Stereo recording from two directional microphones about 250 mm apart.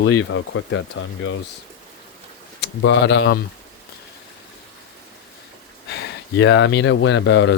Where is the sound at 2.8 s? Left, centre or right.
Left.